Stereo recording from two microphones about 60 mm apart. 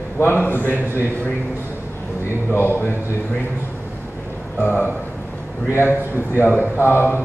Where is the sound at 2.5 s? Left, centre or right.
Left.